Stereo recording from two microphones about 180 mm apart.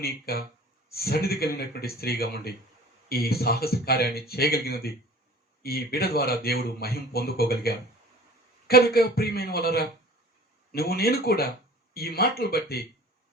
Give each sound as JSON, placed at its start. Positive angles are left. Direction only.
{"t": 0.0, "sound": "speech", "side_deg": 60}